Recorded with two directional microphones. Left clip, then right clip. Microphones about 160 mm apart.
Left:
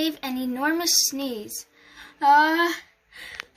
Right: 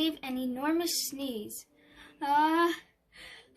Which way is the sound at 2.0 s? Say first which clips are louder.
Left 10 dB; 40° left (ahead or behind).